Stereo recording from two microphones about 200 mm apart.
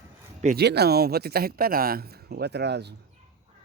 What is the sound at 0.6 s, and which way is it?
Speech, 55° right (ahead or behind).